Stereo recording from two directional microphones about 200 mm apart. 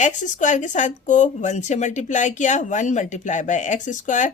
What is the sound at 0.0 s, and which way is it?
Speech, 40° left (ahead or behind).